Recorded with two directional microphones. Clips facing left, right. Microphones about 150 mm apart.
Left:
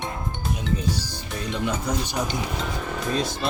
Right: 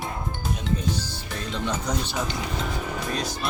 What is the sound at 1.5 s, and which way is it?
Speech, 10° left (ahead or behind).